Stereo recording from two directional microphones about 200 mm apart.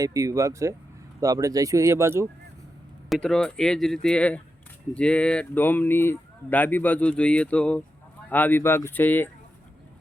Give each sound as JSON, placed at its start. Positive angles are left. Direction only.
{"t": 0.0, "sound": "speech", "side_deg": -15}
{"t": 3.1, "sound": "speech", "side_deg": 5}